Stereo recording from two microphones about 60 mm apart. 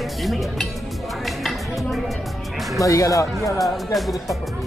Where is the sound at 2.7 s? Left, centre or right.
Left.